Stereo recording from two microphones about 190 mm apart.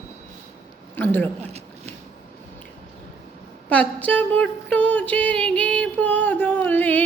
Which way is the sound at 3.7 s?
5° left (ahead or behind).